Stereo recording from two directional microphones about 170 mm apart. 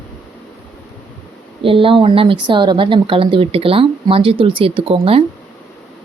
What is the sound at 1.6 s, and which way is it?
Speech, 30° right (ahead or behind).